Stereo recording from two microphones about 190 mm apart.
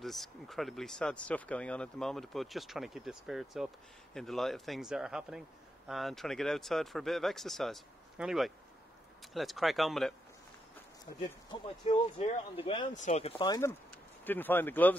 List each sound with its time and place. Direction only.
0.0 s speech: centre (ahead or behind)
11.8 s speech: 30° left (ahead or behind)
13.4 s speech: 15° left (ahead or behind)